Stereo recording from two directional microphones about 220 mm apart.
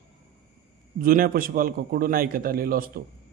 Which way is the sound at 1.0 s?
40° right (ahead or behind).